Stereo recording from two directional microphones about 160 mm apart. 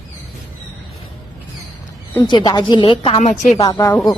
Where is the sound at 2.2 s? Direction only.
30° left (ahead or behind).